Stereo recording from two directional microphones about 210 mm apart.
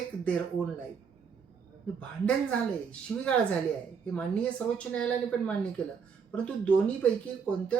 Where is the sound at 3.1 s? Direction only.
5° left (ahead or behind).